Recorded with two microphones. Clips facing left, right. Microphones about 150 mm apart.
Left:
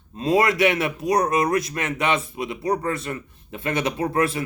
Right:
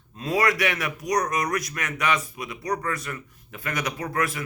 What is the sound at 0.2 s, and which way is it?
A man's voice, 25° left (ahead or behind).